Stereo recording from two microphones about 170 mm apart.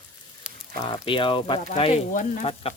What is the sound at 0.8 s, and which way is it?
Speech, 30° left (ahead or behind).